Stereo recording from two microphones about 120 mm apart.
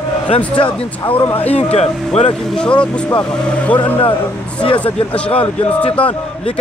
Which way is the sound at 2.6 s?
10° left (ahead or behind).